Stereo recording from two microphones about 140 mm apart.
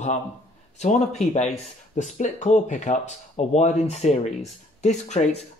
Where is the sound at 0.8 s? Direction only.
55° left (ahead or behind).